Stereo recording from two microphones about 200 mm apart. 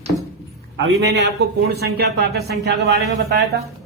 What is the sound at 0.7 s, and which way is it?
Speech, 60° right (ahead or behind).